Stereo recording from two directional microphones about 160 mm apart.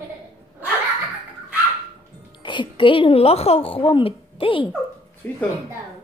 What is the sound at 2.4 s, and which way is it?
A woman's voice, 30° left (ahead or behind).